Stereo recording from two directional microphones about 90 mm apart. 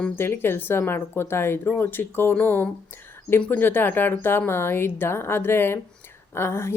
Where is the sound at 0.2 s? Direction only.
25° left (ahead or behind).